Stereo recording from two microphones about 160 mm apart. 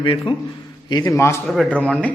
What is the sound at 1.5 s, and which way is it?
Speech, centre (ahead or behind).